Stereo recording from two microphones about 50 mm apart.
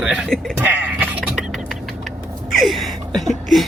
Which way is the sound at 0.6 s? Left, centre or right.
Right.